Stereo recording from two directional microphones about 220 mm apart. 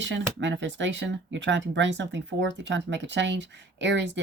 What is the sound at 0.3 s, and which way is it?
Speech, 55° right (ahead or behind).